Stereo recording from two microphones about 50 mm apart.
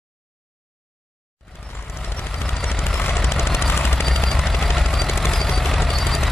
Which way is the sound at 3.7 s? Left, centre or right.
Left.